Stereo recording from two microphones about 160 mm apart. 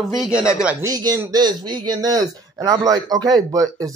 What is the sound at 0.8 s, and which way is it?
Speech, 20° right (ahead or behind).